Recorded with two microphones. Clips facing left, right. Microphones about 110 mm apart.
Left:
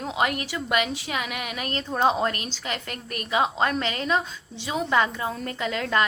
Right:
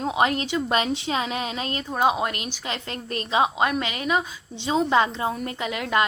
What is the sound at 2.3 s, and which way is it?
A woman's voice, 20° right (ahead or behind).